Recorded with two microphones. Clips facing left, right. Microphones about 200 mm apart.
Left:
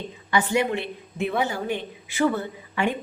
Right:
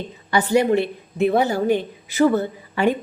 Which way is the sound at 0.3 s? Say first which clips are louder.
Right 5 dB; 35° right (ahead or behind).